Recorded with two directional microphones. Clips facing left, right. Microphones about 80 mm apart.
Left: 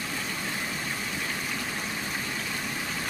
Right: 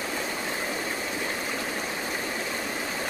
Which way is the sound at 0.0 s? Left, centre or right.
Right.